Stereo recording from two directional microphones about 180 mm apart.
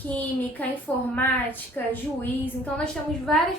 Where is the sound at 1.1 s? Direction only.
10° left (ahead or behind).